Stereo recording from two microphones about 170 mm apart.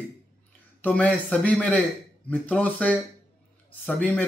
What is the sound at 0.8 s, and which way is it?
A man's voice, 5° left (ahead or behind).